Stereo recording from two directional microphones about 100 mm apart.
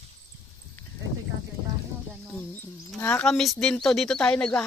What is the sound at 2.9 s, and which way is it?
Speech, 15° left (ahead or behind).